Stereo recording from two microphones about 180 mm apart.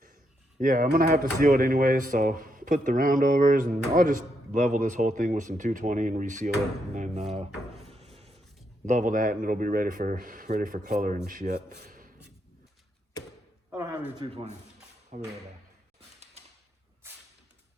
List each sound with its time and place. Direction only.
0.6 s speech: 50° right (ahead or behind)
1.4 s speech: 50° right (ahead or behind)
7.9 s a sound: 35° right (ahead or behind)
8.9 s speech: 45° right (ahead or behind)
11.7 s a sound: 45° right (ahead or behind)
13.7 s a sound: 10° right (ahead or behind)
14.2 s speech: 35° right (ahead or behind)
15.1 s speech: 45° right (ahead or behind)
17.0 s whip: 15° right (ahead or behind)